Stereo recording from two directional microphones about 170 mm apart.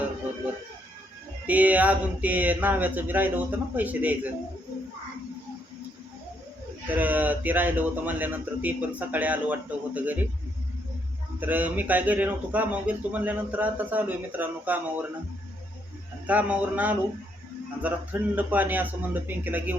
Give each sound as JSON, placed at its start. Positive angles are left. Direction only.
{"t": 1.5, "sound": "a man's voice", "side_deg": -10}
{"t": 6.8, "sound": "a man's voice", "side_deg": -10}
{"t": 11.3, "sound": "a man's voice", "side_deg": -10}
{"t": 16.2, "sound": "a man's voice", "side_deg": -10}